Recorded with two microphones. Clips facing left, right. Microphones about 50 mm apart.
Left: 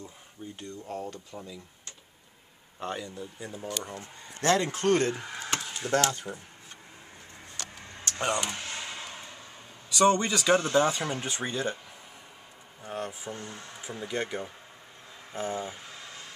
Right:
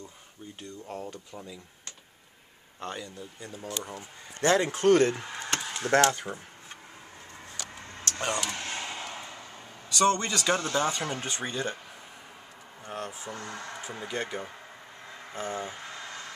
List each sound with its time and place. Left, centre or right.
0.6 s speech: centre
2.8 s speech: centre
3.6 s speech: centre
5.1 s wood: centre
5.7 s mechanisms: right
6.1 s speech: right
8.0 s speech: centre
8.6 s a sound: right
8.9 s a sound: centre
9.8 s speech: centre
12.8 s speech: centre
13.3 s speech: right
14.0 s speech: centre
16.1 s a sound: right